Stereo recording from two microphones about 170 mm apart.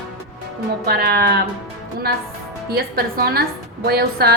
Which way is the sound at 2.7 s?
65° right (ahead or behind).